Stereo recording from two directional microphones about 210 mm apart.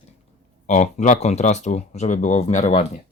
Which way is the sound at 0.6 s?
35° left (ahead or behind).